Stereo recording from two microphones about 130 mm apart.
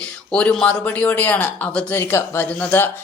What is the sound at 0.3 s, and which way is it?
Speech, 10° left (ahead or behind).